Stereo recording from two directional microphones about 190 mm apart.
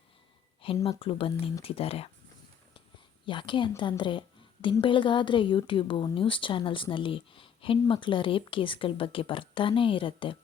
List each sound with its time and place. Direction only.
0.9 s a woman's voice: 30° left (ahead or behind)
3.2 s a woman's voice: 25° left (ahead or behind)